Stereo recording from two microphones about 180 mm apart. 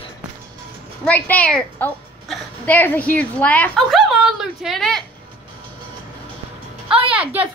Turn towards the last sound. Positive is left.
turn(degrees=-5)  # may be behind; listen again after turning